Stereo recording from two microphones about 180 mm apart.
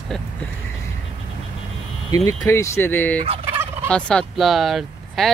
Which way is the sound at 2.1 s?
20° left (ahead or behind).